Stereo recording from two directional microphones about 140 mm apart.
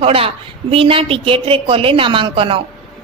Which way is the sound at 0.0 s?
45° right (ahead or behind).